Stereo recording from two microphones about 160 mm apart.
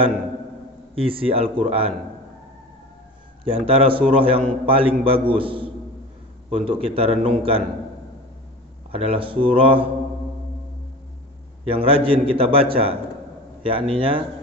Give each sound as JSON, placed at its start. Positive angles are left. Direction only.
{"t": 0.9, "sound": "a man's voice", "side_deg": -35}
{"t": 3.4, "sound": "a man's voice", "side_deg": -35}
{"t": 8.9, "sound": "a man's voice", "side_deg": -35}
{"t": 11.6, "sound": "a man's voice", "side_deg": -35}